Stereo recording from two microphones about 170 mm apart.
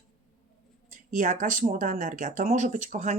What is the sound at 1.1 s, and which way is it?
Speech, 50° right (ahead or behind).